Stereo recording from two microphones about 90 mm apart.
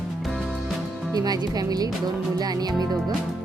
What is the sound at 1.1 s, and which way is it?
Speech, 45° right (ahead or behind).